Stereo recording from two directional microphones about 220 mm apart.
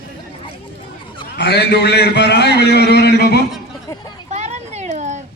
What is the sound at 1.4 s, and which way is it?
A man's voice, 50° left (ahead or behind).